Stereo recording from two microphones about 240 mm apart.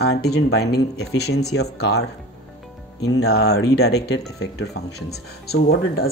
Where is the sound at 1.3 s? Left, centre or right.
Left.